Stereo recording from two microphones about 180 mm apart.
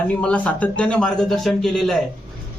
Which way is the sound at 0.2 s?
5° left (ahead or behind).